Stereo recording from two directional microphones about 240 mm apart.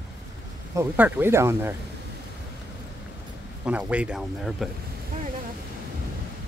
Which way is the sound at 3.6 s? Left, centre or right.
Centre.